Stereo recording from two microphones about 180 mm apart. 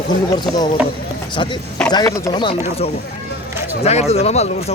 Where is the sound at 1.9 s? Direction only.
20° left (ahead or behind).